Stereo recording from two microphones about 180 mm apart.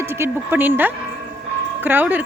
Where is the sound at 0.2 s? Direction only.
10° right (ahead or behind).